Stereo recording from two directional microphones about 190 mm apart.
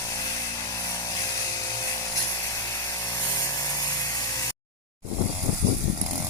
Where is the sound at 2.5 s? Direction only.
15° left (ahead or behind).